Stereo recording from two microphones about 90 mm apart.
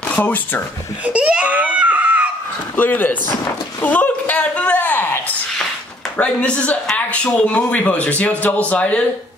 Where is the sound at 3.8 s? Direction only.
15° left (ahead or behind).